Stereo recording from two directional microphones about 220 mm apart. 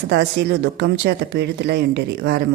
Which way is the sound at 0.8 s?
50° right (ahead or behind).